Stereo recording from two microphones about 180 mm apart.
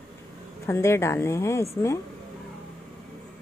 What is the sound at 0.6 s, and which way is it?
A woman's voice, 15° left (ahead or behind).